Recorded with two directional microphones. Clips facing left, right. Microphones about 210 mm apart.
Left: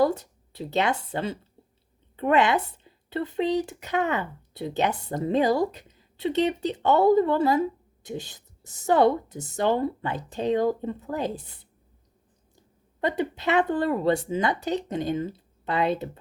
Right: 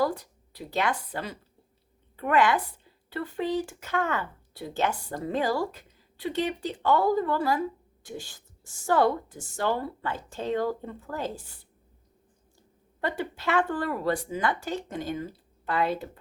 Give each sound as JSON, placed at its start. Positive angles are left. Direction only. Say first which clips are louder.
{"t": 0.0, "sound": "speech", "louder": "left 5 dB", "side_deg": 25}
{"t": 13.0, "sound": "speech", "louder": "left 5 dB", "side_deg": 20}